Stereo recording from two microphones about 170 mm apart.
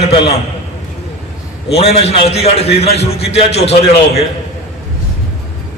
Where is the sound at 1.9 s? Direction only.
35° left (ahead or behind).